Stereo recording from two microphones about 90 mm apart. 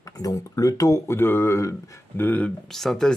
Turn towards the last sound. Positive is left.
turn(degrees=5)  # may be behind; listen again after turning